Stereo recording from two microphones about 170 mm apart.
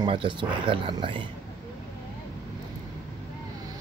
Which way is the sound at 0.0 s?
30° right (ahead or behind).